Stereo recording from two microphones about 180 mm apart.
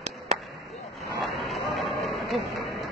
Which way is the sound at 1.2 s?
Centre (ahead or behind).